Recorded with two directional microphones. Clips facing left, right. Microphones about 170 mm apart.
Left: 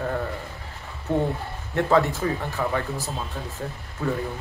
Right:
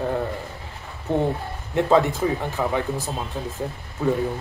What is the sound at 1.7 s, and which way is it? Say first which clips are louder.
A man's voice: right 2 dB; 20° right (ahead or behind).